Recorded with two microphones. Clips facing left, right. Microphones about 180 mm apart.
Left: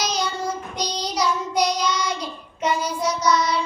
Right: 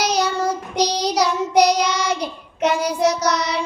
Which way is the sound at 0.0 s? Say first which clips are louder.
Right 5 dB; 65° right (ahead or behind).